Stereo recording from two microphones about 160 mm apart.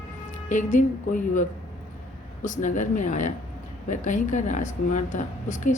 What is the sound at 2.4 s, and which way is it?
A woman's voice, 50° left (ahead or behind).